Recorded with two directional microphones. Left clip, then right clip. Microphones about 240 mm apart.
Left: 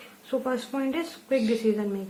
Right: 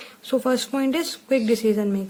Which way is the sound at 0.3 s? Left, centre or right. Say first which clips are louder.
Right 6 dB; right.